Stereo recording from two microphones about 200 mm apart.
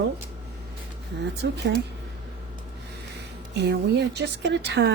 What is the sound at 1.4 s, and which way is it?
Speech, 55° right (ahead or behind).